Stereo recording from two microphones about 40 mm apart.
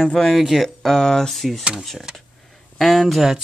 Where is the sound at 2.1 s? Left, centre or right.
Right.